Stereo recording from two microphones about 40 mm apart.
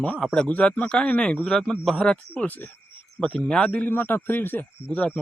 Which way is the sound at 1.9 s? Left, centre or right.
Left.